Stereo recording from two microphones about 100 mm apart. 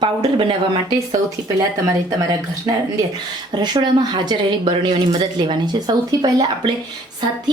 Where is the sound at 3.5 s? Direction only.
45° right (ahead or behind).